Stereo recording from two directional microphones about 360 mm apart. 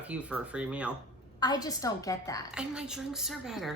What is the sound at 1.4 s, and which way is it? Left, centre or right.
A woman's voice, centre.